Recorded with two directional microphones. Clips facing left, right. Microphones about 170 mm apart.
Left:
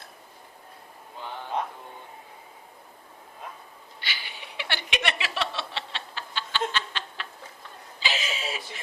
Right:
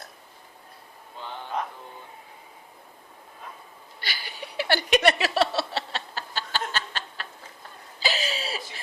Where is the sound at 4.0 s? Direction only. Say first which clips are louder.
Right 3 dB; 40° right (ahead or behind).